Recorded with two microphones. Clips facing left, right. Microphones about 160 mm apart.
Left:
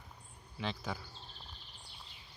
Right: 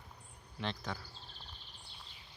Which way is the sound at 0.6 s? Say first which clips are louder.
Left 1 dB; 5° left (ahead or behind).